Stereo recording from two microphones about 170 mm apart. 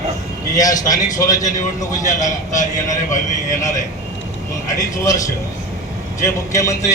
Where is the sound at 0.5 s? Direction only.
20° left (ahead or behind).